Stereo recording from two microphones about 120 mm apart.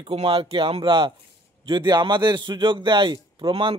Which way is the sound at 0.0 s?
55° right (ahead or behind).